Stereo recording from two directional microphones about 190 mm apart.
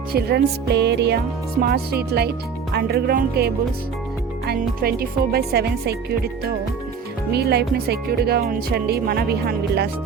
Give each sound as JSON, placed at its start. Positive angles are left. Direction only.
{"t": 0.1, "sound": "speech", "side_deg": -55}
{"t": 7.3, "sound": "speech", "side_deg": -60}